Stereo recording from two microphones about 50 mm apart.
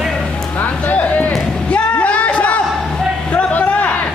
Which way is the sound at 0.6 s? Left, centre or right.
Left.